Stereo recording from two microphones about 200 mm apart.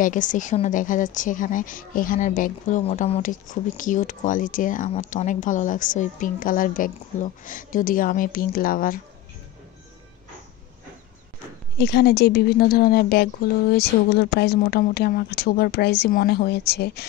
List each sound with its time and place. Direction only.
0.0 s speech: 40° left (ahead or behind)
11.8 s speech: 55° left (ahead or behind)